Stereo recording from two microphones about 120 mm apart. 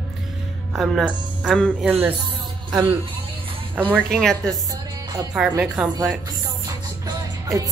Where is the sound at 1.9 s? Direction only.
15° right (ahead or behind).